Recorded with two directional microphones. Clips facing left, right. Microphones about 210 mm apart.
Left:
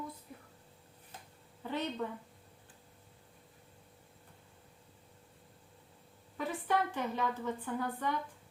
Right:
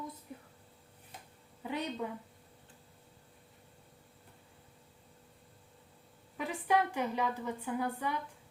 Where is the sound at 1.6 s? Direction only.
10° right (ahead or behind).